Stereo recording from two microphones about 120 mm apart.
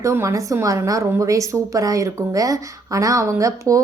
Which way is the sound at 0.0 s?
25° right (ahead or behind).